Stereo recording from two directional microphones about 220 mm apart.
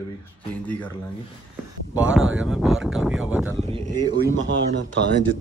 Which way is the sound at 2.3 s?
Centre (ahead or behind).